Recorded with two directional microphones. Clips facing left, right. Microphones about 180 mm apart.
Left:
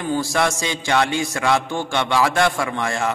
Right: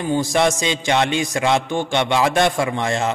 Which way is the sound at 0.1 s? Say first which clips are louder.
Right 3 dB; 20° right (ahead or behind).